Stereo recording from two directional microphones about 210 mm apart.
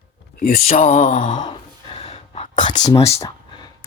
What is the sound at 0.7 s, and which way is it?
Mantra, 30° left (ahead or behind).